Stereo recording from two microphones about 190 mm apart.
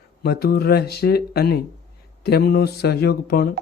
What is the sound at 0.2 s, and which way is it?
Speech, 55° left (ahead or behind).